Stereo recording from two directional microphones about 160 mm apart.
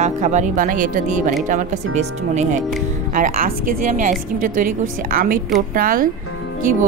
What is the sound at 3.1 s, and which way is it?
Speech, 60° right (ahead or behind).